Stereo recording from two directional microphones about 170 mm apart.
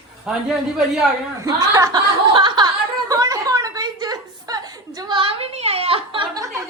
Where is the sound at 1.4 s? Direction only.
20° right (ahead or behind).